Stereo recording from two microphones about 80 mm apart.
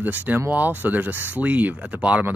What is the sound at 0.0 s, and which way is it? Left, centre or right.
Speech, right.